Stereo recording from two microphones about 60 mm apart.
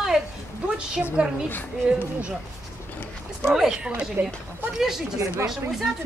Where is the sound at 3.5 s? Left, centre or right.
Centre.